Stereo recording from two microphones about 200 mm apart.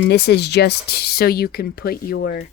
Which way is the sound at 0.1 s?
55° left (ahead or behind).